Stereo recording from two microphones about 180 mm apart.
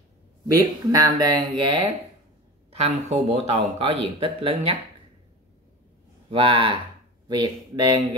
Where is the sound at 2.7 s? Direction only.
35° right (ahead or behind).